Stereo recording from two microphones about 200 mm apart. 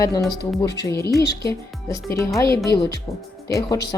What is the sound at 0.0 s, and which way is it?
Speech, 15° left (ahead or behind).